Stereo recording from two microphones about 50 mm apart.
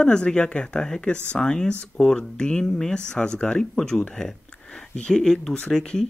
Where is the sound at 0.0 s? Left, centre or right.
Centre.